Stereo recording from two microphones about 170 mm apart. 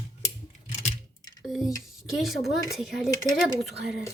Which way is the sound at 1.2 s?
20° left (ahead or behind).